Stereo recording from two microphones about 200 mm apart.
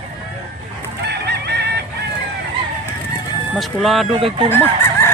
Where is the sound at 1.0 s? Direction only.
55° right (ahead or behind).